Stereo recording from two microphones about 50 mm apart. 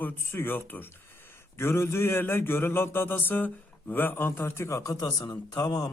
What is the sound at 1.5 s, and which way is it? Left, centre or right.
A man's voice, left.